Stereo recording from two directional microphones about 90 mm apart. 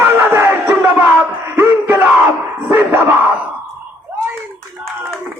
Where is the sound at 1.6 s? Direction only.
25° right (ahead or behind).